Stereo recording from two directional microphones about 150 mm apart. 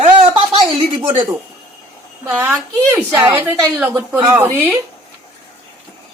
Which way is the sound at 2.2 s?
15° right (ahead or behind).